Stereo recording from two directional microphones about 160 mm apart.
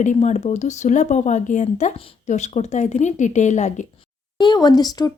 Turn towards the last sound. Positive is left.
turn(degrees=25)  # may be behind; listen again after turning